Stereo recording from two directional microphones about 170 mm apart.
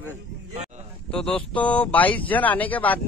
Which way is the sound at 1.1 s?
5° left (ahead or behind).